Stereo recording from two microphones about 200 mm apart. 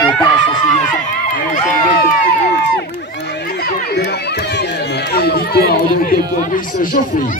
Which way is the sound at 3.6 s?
55° left (ahead or behind).